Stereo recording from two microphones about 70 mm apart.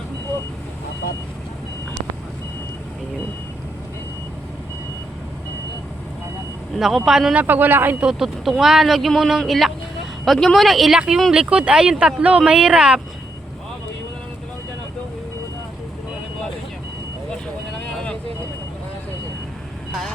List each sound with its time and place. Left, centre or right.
6.7 s speech: centre
7.3 s a man's voice: right
8.0 s speech: centre